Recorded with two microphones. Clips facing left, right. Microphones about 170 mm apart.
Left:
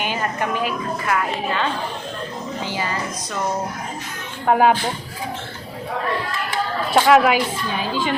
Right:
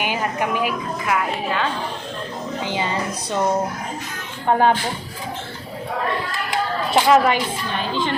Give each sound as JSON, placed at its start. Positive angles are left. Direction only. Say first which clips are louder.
{"t": 0.0, "sound": "a woman's voice", "louder": "right 1 dB", "side_deg": -10}
{"t": 2.6, "sound": "speech", "louder": "right 3 dB", "side_deg": -20}
{"t": 4.4, "sound": "a woman's voice", "louder": "left 1 dB", "side_deg": 5}
{"t": 6.9, "sound": "a woman's voice", "louder": "left 1 dB", "side_deg": 5}